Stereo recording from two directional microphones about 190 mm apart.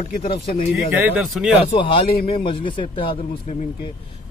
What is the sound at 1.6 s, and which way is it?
A man's voice, 30° left (ahead or behind).